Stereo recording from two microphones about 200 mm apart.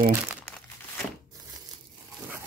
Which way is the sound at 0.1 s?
10° right (ahead or behind).